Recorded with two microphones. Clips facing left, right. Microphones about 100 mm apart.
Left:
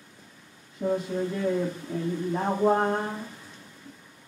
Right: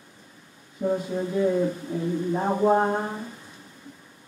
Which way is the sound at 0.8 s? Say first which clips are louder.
Right 1 dB; 15° right (ahead or behind).